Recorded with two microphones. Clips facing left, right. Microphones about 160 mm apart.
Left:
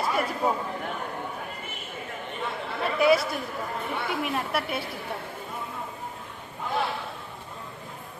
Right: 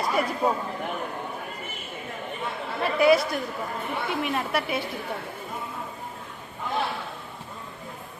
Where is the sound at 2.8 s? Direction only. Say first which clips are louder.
Right 2 dB; centre (ahead or behind).